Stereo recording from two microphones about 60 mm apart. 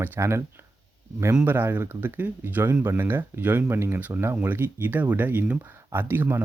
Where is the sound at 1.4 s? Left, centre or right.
Right.